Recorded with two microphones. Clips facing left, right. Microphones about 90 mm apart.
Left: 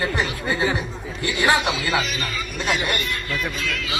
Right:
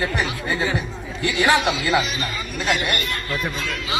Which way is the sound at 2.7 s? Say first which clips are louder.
Even; 55° right (ahead or behind).